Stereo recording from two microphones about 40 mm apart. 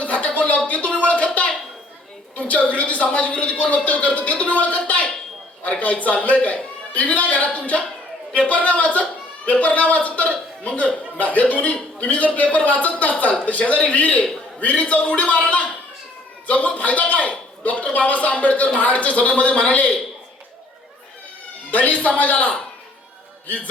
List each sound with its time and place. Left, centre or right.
0.0 s a sound: left
2.3 s a man's voice: left
21.7 s a man's voice: left